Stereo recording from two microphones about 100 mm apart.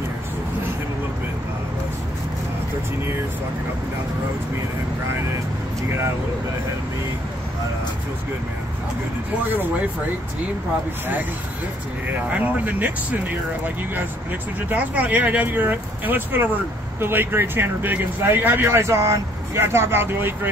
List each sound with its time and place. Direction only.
9.5 s speech: 20° right (ahead or behind)
12.1 s speech: 15° right (ahead or behind)
14.7 s speech: 15° right (ahead or behind)